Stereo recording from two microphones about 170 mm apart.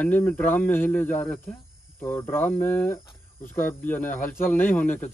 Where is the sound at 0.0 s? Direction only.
10° left (ahead or behind).